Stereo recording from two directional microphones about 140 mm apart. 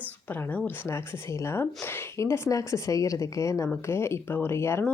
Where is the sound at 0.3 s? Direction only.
10° left (ahead or behind).